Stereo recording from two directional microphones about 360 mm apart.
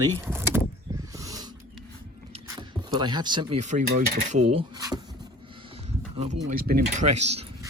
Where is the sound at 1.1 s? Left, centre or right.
Centre.